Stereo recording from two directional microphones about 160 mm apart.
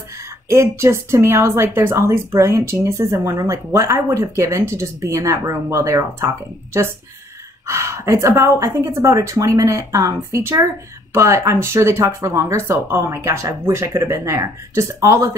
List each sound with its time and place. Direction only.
0.5 s a woman's voice: 15° right (ahead or behind)